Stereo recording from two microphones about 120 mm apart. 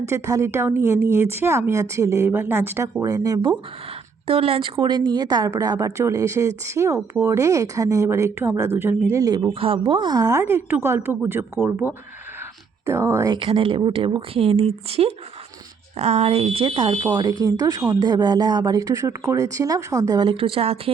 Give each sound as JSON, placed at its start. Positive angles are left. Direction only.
{"t": 0.0, "sound": "a woman's voice", "side_deg": -25}
{"t": 4.3, "sound": "a woman's voice", "side_deg": -55}
{"t": 9.6, "sound": "a woman's voice", "side_deg": -50}
{"t": 13.3, "sound": "speech", "side_deg": -50}
{"t": 20.2, "sound": "speech", "side_deg": -50}